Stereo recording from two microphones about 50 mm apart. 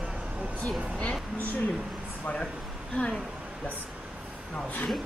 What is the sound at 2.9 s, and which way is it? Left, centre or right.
Speech, centre.